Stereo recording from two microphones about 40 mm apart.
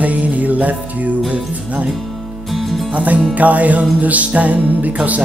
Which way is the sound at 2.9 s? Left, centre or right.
Right.